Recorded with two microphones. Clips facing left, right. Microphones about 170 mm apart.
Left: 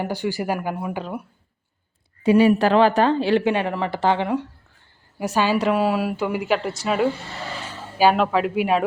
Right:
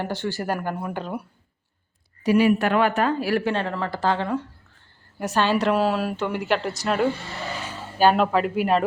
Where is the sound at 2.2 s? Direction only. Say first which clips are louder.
Left 3 dB; 30° left (ahead or behind).